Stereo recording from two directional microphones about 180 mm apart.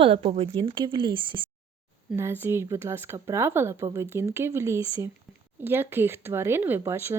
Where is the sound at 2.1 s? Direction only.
15° right (ahead or behind).